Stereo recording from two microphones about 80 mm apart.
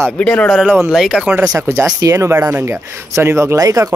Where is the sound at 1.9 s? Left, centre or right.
Right.